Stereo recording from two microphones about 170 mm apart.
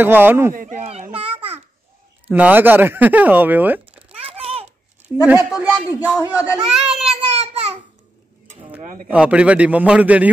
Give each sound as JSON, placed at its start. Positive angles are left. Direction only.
{"t": 0.0, "sound": "speech", "side_deg": -10}
{"t": 0.6, "sound": "a sound", "side_deg": -50}
{"t": 2.2, "sound": "speech", "side_deg": -10}
{"t": 4.3, "sound": "babbling", "side_deg": -35}
{"t": 5.2, "sound": "a child's voice", "side_deg": -10}
{"t": 9.1, "sound": "speech", "side_deg": -5}